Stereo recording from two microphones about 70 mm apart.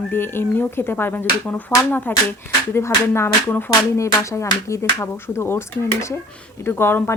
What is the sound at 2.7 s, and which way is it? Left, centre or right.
A woman's voice, left.